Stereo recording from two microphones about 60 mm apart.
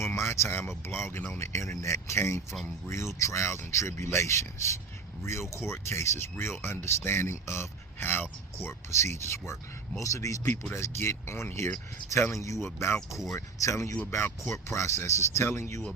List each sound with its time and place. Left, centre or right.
0.0 s a sound: left
0.9 s speech: left
1.4 s speech: left
10.0 s speech: left
10.8 s speech: left
12.3 s speech: left
12.6 s speech: left
13.3 s speech: left